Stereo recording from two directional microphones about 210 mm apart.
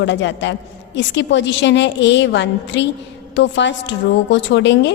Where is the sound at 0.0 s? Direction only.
60° left (ahead or behind).